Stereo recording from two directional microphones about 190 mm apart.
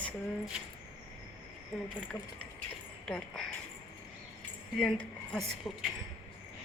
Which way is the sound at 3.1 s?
5° left (ahead or behind).